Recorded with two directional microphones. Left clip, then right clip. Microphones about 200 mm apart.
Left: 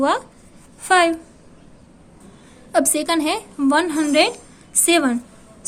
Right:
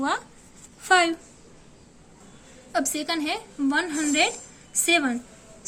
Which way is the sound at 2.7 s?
35° left (ahead or behind).